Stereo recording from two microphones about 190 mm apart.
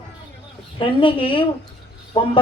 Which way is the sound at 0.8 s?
25° left (ahead or behind).